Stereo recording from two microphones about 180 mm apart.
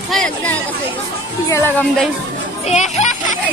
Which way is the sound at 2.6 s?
40° left (ahead or behind).